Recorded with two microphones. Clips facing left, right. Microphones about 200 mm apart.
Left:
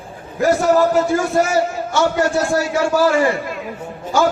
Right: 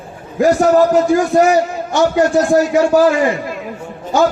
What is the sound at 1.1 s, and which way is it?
A man's voice, 15° right (ahead or behind).